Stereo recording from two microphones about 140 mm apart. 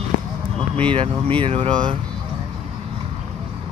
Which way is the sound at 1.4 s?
40° right (ahead or behind).